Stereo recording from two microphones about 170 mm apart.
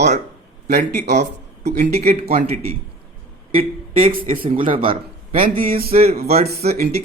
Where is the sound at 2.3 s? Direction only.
40° right (ahead or behind).